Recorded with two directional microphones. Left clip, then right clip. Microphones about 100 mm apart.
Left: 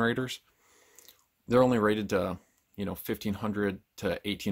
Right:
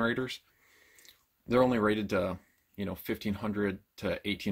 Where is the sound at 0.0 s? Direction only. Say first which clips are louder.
Left 2 dB; 50° left (ahead or behind).